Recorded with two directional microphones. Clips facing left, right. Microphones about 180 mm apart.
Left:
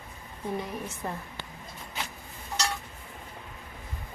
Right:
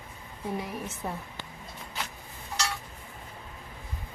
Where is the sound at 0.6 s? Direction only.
5° right (ahead or behind).